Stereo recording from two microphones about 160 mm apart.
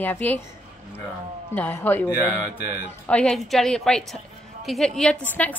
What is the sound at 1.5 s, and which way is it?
A woman's voice, 10° left (ahead or behind).